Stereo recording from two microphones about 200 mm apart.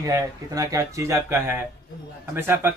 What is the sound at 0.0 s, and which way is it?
A man's voice, 20° right (ahead or behind).